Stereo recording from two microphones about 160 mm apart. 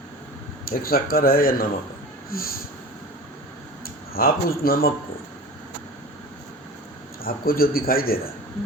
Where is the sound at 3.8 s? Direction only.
70° left (ahead or behind).